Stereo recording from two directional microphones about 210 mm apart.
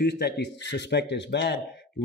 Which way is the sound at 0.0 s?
50° left (ahead or behind).